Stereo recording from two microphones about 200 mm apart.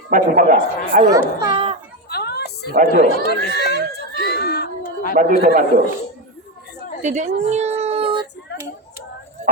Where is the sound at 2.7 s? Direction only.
45° right (ahead or behind).